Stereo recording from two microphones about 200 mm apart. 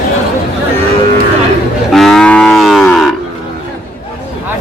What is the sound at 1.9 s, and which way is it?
Moo, centre (ahead or behind).